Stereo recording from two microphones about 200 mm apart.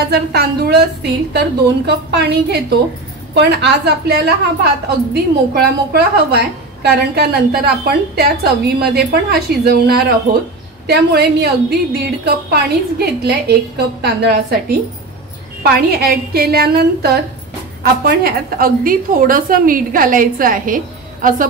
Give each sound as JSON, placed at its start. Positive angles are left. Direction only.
{"t": 0.0, "sound": "a woman's voice", "side_deg": -50}